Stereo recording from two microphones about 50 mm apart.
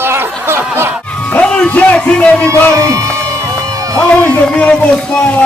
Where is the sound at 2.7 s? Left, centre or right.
Right.